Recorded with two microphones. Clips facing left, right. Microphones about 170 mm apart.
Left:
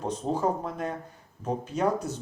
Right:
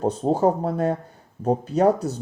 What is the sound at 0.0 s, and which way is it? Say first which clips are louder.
Speech: right 8 dB; 35° right (ahead or behind).